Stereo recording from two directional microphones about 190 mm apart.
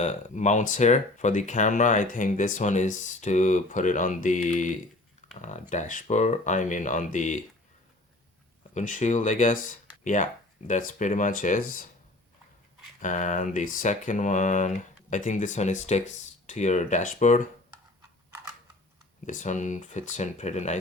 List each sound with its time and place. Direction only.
0.0 s speech: 40° left (ahead or behind)
8.7 s speech: 40° left (ahead or behind)
13.0 s speech: 40° left (ahead or behind)
19.2 s speech: 40° left (ahead or behind)